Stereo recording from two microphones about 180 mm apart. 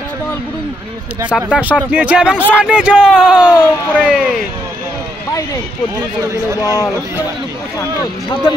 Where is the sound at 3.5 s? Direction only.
10° left (ahead or behind).